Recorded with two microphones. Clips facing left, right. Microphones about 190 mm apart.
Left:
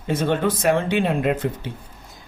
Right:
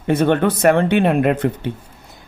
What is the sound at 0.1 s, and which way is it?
Speech, 65° right (ahead or behind).